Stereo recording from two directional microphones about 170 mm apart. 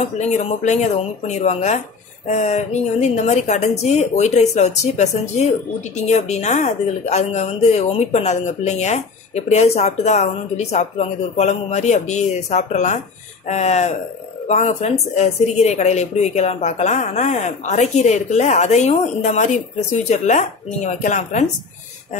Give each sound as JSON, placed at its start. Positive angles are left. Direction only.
{"t": 0.0, "sound": "a woman's voice", "side_deg": 40}